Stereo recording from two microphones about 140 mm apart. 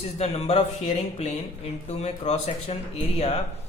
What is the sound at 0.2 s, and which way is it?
Speech, 50° left (ahead or behind).